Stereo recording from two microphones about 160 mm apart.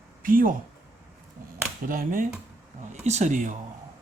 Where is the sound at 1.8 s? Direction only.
60° right (ahead or behind).